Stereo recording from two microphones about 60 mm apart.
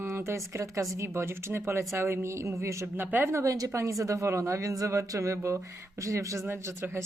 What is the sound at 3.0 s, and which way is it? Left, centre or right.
Speech, right.